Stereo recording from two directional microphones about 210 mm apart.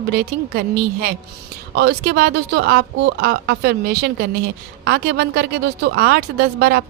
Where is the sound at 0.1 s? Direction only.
45° right (ahead or behind).